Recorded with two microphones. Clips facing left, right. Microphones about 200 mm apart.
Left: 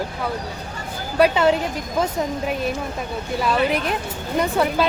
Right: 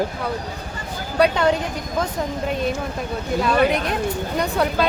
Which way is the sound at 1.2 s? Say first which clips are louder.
Left 1 dB; 5° left (ahead or behind).